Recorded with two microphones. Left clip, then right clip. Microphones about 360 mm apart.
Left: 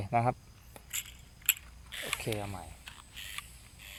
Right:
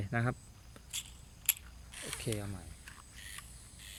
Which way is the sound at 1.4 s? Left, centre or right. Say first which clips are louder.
Left 6 dB; centre.